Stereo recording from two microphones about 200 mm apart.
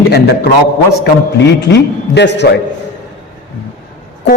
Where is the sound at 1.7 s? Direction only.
60° left (ahead or behind).